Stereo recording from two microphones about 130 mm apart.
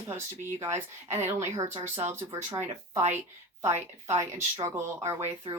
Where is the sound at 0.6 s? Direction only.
20° right (ahead or behind).